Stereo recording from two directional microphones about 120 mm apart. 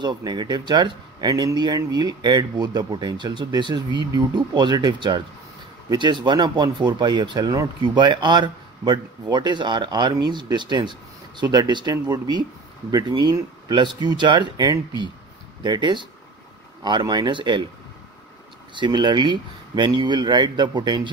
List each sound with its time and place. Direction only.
0.0 s speech: 35° right (ahead or behind)
18.8 s speech: 40° right (ahead or behind)